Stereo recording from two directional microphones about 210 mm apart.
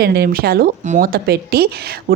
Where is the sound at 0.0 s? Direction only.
50° right (ahead or behind).